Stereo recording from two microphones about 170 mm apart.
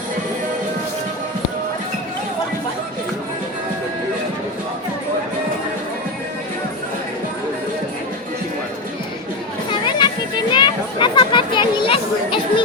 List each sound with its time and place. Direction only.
9.8 s children playing: 25° left (ahead or behind)